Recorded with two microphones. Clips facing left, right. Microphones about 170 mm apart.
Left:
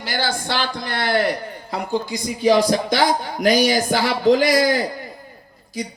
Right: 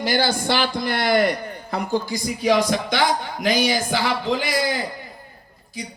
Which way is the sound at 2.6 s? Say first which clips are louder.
Left 3 dB; 35° left (ahead or behind).